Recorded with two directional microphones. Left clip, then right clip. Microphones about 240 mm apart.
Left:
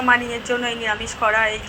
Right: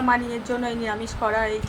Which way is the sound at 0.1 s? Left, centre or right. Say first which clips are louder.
Left 6 dB; centre.